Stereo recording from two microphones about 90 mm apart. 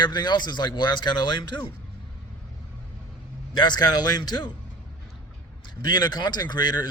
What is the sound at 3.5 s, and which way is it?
Speech, 50° left (ahead or behind).